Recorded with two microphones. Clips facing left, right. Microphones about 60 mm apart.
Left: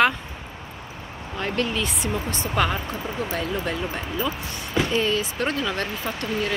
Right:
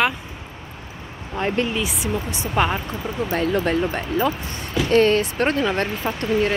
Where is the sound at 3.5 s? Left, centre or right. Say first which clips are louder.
Right 6 dB; right.